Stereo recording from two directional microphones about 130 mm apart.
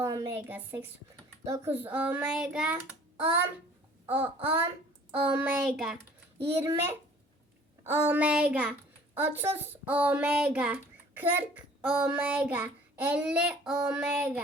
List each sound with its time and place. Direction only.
0.0 s a child's voice: 25° right (ahead or behind); by 2.6 s 5° right (ahead or behind)
4.1 s a child's voice: 15° right (ahead or behind)
6.4 s a child's voice: 20° right (ahead or behind)